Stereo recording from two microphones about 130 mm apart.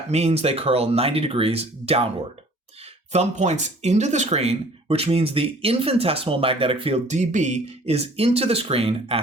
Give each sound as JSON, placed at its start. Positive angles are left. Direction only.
{"t": 0.1, "sound": "speech", "side_deg": -55}
{"t": 3.1, "sound": "speech", "side_deg": -60}